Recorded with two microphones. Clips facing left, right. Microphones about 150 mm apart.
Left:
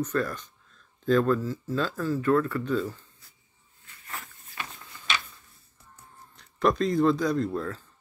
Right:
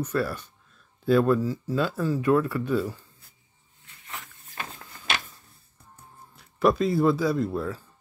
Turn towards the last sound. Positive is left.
turn(degrees=-10)  # may be behind; listen again after turning